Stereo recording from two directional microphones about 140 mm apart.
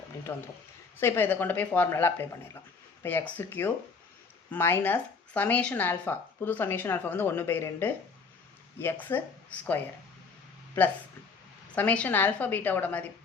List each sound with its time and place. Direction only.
0.3 s speech: 15° left (ahead or behind)
11.7 s speech: 10° left (ahead or behind)